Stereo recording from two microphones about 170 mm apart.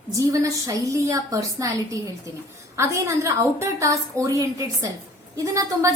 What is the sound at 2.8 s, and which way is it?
A woman's voice, 15° right (ahead or behind).